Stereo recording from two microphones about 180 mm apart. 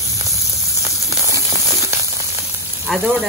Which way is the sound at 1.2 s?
15° right (ahead or behind).